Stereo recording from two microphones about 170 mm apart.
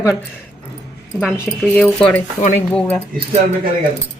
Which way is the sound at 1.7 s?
10° left (ahead or behind).